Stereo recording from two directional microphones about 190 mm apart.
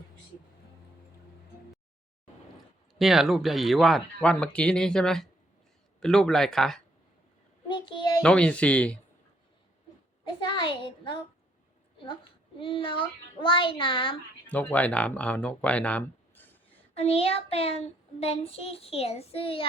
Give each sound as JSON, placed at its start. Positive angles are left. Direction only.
{"t": 3.0, "sound": "speech", "side_deg": 0}
{"t": 7.7, "sound": "child singing", "side_deg": 25}
{"t": 8.2, "sound": "speech", "side_deg": 5}
{"t": 10.2, "sound": "speech", "side_deg": 25}
{"t": 12.5, "sound": "speech", "side_deg": 30}
{"t": 14.4, "sound": "speech", "side_deg": 10}
{"t": 16.9, "sound": "child singing", "side_deg": 30}